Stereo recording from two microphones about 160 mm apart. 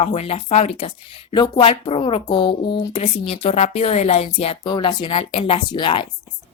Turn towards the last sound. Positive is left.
turn(degrees=30)  # may be behind; listen again after turning